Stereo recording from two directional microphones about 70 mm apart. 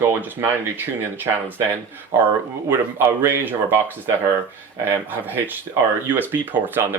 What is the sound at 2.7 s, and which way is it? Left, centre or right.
Speech, right.